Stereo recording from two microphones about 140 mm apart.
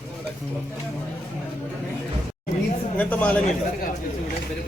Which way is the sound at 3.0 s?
10° left (ahead or behind).